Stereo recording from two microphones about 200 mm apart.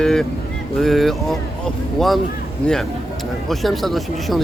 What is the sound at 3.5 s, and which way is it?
Speech, centre (ahead or behind).